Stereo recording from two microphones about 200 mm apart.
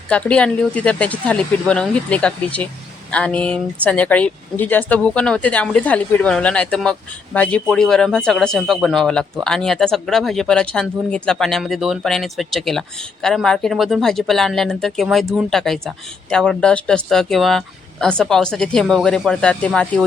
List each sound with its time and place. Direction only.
0.1 s speech: 5° left (ahead or behind)